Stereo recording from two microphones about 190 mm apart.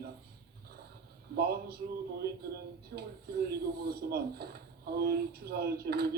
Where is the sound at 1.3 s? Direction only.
55° right (ahead or behind).